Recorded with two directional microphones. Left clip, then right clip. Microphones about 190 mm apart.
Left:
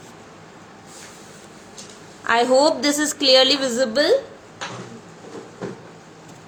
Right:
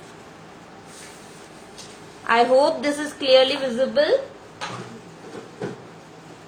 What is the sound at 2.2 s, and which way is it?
A woman's voice, 25° left (ahead or behind).